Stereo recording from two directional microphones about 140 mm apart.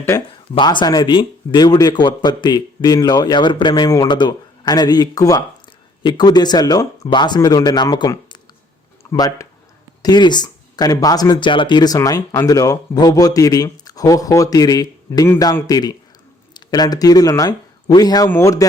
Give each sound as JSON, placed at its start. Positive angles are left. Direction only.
{"t": 0.3, "sound": "speech", "side_deg": 35}